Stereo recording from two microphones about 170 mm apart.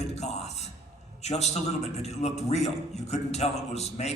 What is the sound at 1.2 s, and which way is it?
A man's voice, 40° left (ahead or behind).